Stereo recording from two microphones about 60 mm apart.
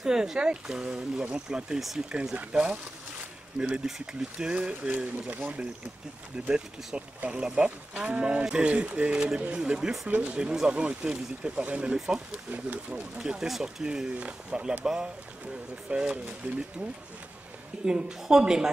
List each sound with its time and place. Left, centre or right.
0.0 s speech: centre
3.8 s speech: centre
6.5 s speech: centre
13.2 s speech: centre
17.8 s speech: centre